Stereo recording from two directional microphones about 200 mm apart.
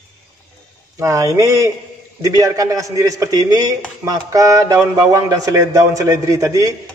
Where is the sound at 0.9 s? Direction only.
15° right (ahead or behind).